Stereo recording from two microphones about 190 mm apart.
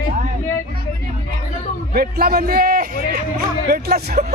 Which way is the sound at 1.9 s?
50° right (ahead or behind).